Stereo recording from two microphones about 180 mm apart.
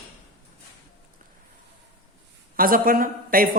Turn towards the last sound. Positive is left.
turn(degrees=-50)  # may be behind; listen again after turning